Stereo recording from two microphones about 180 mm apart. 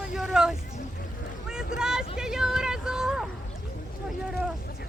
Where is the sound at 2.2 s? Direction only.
5° right (ahead or behind).